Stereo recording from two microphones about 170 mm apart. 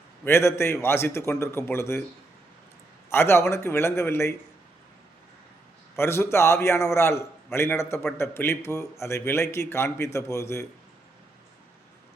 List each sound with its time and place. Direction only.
0.3 s a man's voice: 15° left (ahead or behind)
3.1 s a man's voice: 15° left (ahead or behind)
6.0 s a man's voice: 15° left (ahead or behind)